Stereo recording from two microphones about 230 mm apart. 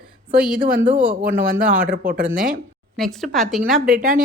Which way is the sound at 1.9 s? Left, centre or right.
Right.